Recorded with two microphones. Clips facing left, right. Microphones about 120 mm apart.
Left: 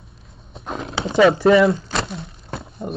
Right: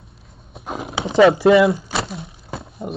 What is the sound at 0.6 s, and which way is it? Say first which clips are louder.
Clip-clop: even; 5° right (ahead or behind).